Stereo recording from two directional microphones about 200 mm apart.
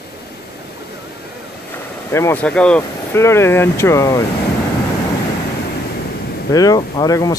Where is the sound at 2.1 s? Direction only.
10° left (ahead or behind).